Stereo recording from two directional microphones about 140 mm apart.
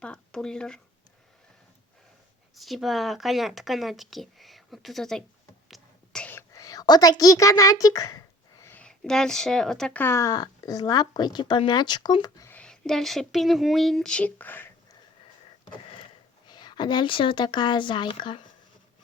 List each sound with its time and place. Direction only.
0.0 s speech: 5° left (ahead or behind)
2.6 s speech: centre (ahead or behind)
5.6 s whispering: centre (ahead or behind)
6.5 s a woman's voice: 25° left (ahead or behind)
8.6 s speech: 10° left (ahead or behind)
12.5 s speech: 5° left (ahead or behind)
16.5 s speech: 30° left (ahead or behind)